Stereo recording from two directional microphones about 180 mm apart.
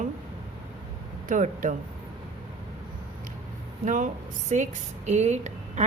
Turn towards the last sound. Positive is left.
turn(degrees=-40)  # may be behind; listen again after turning